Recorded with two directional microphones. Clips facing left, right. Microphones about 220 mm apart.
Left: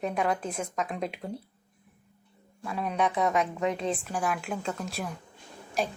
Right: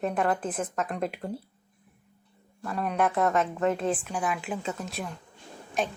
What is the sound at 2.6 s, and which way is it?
A woman's voice, centre (ahead or behind).